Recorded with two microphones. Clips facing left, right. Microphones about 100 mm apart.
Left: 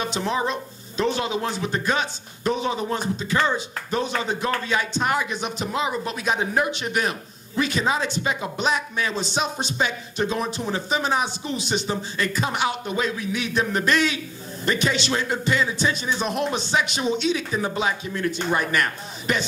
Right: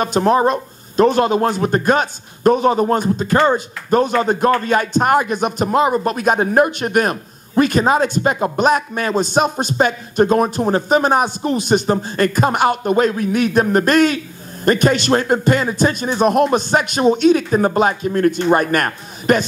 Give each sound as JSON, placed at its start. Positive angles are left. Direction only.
{"t": 0.0, "sound": "speech", "side_deg": -50}